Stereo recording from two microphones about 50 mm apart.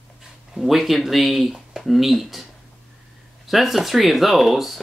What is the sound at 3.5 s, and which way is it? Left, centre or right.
Speech, centre.